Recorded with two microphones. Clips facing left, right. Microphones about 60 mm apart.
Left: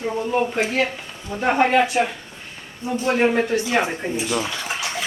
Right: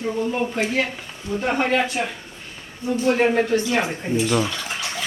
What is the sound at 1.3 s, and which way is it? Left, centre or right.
Speech, left.